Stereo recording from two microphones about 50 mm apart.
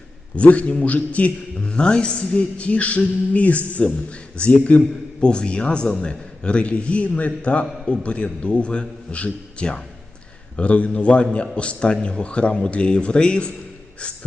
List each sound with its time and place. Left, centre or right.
0.3 s a man's voice: left